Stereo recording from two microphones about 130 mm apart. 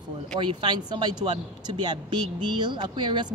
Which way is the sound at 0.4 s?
35° right (ahead or behind).